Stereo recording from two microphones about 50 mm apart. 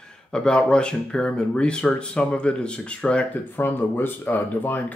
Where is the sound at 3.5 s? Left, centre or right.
Left.